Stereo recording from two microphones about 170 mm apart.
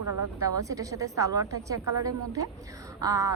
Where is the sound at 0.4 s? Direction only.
20° right (ahead or behind).